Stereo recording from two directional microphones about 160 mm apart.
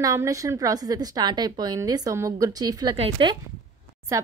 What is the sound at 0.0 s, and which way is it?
A woman's voice, 20° right (ahead or behind).